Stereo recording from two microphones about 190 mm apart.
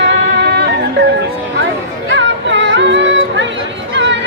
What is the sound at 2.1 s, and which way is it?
Music, 70° right (ahead or behind).